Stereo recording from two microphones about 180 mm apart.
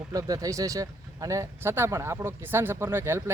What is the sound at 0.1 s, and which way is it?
Speech, 20° right (ahead or behind).